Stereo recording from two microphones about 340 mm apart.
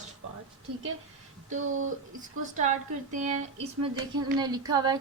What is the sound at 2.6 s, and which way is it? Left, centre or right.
A woman's voice, right.